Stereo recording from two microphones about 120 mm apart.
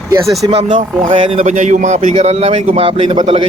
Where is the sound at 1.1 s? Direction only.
50° right (ahead or behind); by 2.0 s 85° right.